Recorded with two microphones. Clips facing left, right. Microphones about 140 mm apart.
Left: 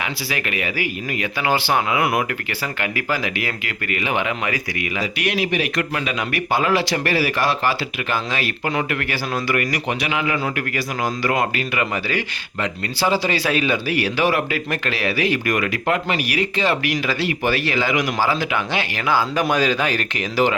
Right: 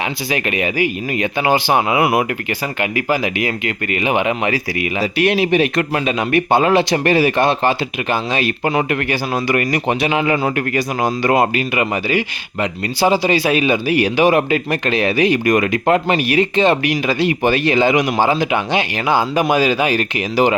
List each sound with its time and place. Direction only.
0.0 s speech: 25° right (ahead or behind)